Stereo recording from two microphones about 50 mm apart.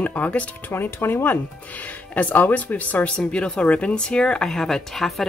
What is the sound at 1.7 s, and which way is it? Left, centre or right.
Speech, left.